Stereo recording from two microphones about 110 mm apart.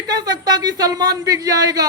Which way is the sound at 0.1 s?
35° right (ahead or behind).